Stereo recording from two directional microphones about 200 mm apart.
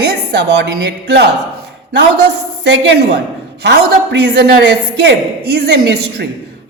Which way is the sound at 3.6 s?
55° right (ahead or behind).